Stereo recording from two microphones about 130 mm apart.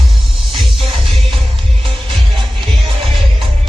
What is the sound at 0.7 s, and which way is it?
Music, 45° right (ahead or behind).